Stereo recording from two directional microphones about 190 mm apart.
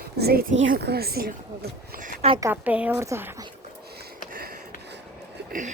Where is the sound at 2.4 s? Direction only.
10° right (ahead or behind).